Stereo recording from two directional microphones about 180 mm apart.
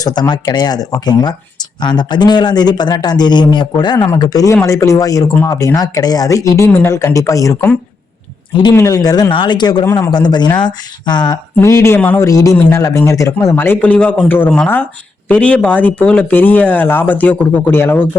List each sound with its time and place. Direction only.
0.0 s a man's voice: 25° left (ahead or behind)
8.7 s a man's voice: 15° left (ahead or behind)